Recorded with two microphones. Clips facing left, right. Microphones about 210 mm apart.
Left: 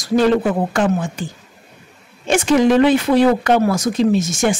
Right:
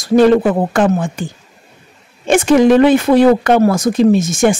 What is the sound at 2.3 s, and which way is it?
Speech, 55° right (ahead or behind).